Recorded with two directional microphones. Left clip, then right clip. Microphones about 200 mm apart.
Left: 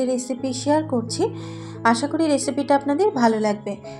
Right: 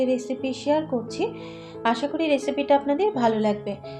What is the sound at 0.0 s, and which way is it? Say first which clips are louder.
A woman's voice: left 1 dB; 30° left (ahead or behind).